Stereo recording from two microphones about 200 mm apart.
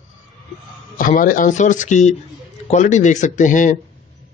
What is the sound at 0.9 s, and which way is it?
Speech, 45° left (ahead or behind).